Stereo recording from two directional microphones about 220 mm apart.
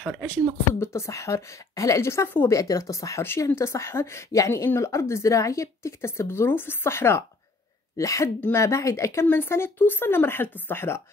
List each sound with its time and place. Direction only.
0.0 s speech: 5° left (ahead or behind)